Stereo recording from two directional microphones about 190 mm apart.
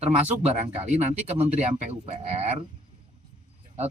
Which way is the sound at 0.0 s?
35° right (ahead or behind).